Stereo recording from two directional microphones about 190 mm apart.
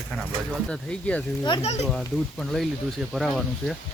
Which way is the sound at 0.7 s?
5° left (ahead or behind).